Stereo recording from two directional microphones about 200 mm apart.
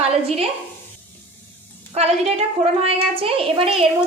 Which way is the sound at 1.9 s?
30° right (ahead or behind).